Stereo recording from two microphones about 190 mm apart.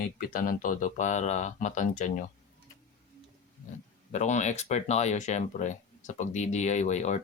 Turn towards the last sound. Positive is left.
turn(degrees=35)  # may be behind; listen again after turning